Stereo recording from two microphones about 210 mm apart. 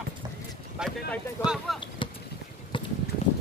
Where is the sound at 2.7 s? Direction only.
25° left (ahead or behind).